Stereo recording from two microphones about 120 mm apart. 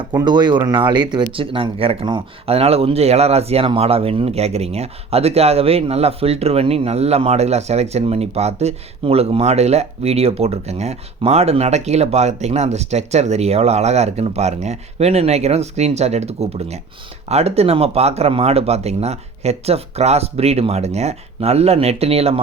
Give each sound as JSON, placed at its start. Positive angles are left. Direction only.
{"t": 0.2, "sound": "speech", "side_deg": -35}